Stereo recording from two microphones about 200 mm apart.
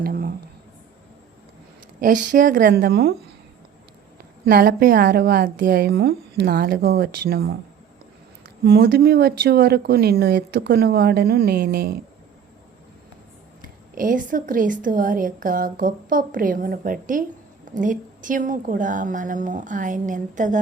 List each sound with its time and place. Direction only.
0.0 s a sound: 45° right (ahead or behind)
2.0 s speech: 45° right (ahead or behind)
4.4 s speech: 50° right (ahead or behind)
8.6 s speech: 55° right (ahead or behind)
13.9 s a woman's voice: 45° right (ahead or behind)